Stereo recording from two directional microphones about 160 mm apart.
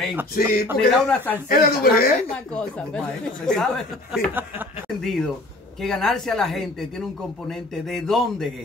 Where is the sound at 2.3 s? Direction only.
5° left (ahead or behind).